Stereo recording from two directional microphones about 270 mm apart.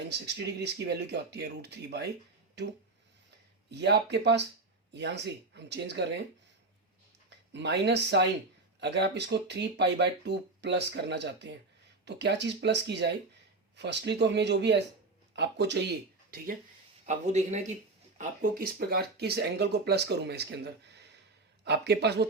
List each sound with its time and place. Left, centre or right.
0.1 s speech: right
3.7 s speech: right
7.3 s speech: right
17.1 s speech: right